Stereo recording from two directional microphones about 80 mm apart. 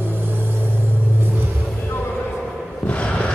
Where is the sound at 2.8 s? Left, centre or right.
Centre.